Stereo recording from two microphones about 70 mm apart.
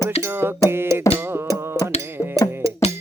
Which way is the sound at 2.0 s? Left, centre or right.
Right.